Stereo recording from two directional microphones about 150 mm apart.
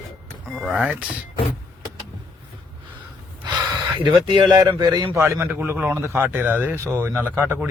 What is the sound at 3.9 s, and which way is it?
A man's voice, 35° right (ahead or behind).